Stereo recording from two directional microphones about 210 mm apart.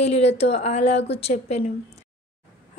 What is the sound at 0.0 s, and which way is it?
A woman's voice, 30° left (ahead or behind).